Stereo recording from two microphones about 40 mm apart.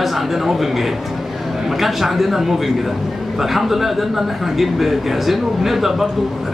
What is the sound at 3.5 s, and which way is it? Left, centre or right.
A man's voice, centre.